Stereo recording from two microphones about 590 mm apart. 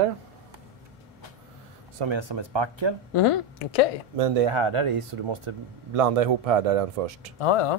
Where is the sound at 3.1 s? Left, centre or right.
Left.